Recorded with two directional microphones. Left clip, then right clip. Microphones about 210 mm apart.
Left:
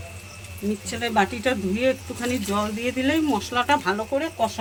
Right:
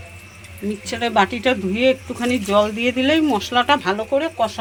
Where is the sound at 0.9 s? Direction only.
15° right (ahead or behind).